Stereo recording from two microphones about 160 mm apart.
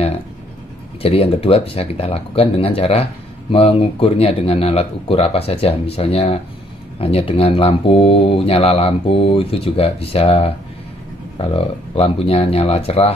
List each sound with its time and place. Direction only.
1.0 s speech: 35° left (ahead or behind)